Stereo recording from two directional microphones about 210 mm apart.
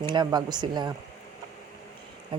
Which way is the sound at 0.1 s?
20° right (ahead or behind).